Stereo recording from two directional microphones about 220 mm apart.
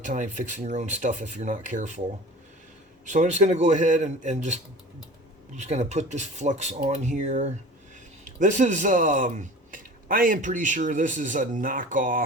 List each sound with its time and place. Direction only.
0.0 s a man's voice: 35° right (ahead or behind)
3.1 s a man's voice: 35° right (ahead or behind)